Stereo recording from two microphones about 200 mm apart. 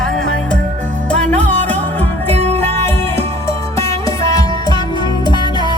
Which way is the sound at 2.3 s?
30° right (ahead or behind).